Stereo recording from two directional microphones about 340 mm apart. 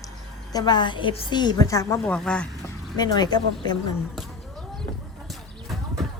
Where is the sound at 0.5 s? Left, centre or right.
Centre.